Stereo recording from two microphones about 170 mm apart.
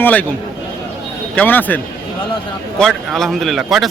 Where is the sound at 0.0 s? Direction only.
10° left (ahead or behind).